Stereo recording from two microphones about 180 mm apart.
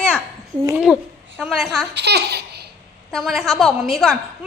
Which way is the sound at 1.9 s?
70° right (ahead or behind).